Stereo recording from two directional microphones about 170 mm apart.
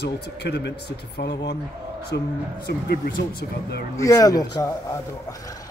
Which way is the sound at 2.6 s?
70° left (ahead or behind).